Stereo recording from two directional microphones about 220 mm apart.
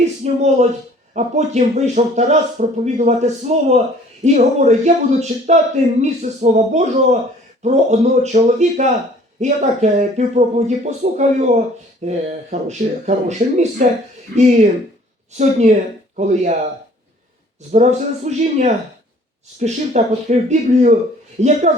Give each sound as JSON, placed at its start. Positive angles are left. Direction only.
{"t": 0.0, "sound": "speech", "side_deg": -30}
{"t": 18.3, "sound": "speech", "side_deg": -30}